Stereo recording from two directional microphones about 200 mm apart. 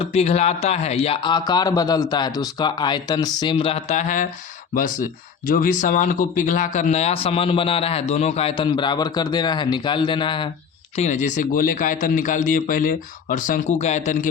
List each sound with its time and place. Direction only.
0.0 s a man's voice: 30° left (ahead or behind)
10.9 s a man's voice: 35° left (ahead or behind)